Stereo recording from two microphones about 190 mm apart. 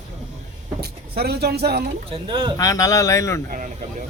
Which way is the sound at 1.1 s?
55° right (ahead or behind).